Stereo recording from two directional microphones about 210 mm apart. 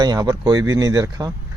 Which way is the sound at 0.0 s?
20° right (ahead or behind).